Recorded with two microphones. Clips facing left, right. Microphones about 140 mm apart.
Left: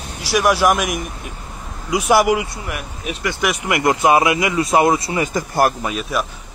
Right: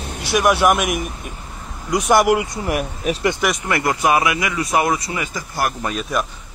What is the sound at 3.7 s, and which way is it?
Speech, 20° left (ahead or behind).